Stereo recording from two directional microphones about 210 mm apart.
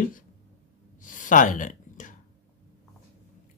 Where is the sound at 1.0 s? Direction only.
40° left (ahead or behind).